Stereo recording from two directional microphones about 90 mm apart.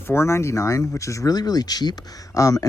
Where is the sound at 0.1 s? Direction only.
30° left (ahead or behind).